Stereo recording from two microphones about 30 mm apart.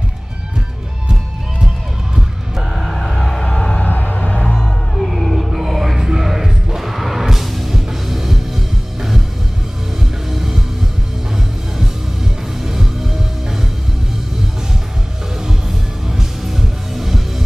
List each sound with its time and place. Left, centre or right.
2.8 s music: centre
3.4 s music: left
3.8 s a sound: left
4.3 s music: left
4.9 s music: centre
5.9 s music: centre
6.2 s music: centre
10.3 s music: centre
12.5 s music: centre
16.1 s music: centre